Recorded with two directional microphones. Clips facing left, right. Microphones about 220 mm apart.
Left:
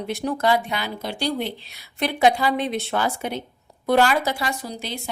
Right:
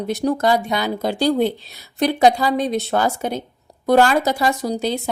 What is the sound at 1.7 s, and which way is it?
Speech, 40° right (ahead or behind).